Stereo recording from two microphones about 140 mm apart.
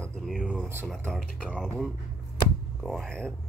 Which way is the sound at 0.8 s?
5° left (ahead or behind).